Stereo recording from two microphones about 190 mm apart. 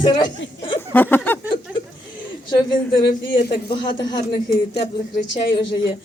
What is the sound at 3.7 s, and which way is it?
Speech, 25° left (ahead or behind).